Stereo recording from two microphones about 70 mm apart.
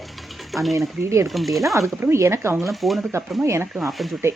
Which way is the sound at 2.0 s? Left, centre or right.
Right.